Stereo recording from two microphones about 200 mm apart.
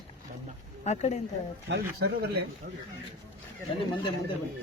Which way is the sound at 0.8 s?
35° left (ahead or behind).